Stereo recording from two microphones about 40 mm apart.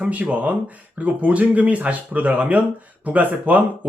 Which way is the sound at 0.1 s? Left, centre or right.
Right.